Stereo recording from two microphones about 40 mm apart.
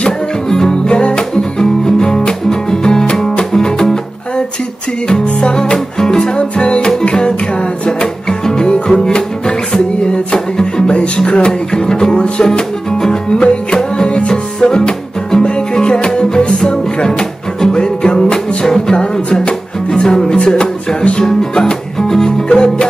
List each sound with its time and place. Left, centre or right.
0.0 s music: centre